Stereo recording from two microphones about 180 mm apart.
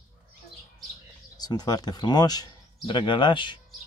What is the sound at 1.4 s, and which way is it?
Speech, 20° left (ahead or behind).